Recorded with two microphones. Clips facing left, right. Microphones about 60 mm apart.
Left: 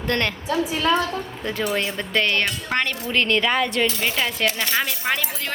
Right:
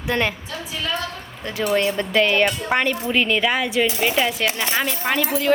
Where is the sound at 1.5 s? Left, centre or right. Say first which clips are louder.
Right 4 dB; centre.